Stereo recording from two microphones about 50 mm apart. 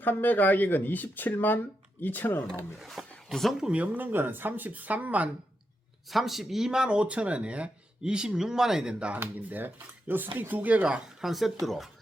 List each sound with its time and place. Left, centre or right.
0.0 s speech: left
2.7 s speech: centre
3.8 s speech: right
6.1 s speech: centre
9.1 s speech: right
10.8 s speech: centre
11.3 s speech: centre